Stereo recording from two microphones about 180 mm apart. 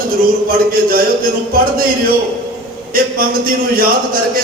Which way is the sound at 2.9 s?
55° right (ahead or behind).